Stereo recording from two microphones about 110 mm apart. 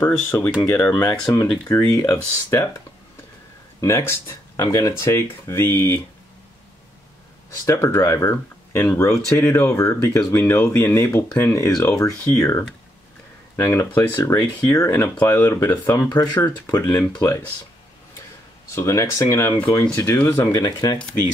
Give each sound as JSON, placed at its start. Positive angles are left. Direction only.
{"t": 0.0, "sound": "speech", "side_deg": 15}
{"t": 1.9, "sound": "speech", "side_deg": 25}
{"t": 3.8, "sound": "speech", "side_deg": 25}
{"t": 7.6, "sound": "speech", "side_deg": 25}
{"t": 18.8, "sound": "speech", "side_deg": 25}
{"t": 20.5, "sound": "speech", "side_deg": 35}